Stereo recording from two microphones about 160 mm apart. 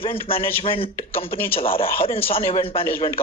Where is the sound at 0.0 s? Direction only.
35° left (ahead or behind).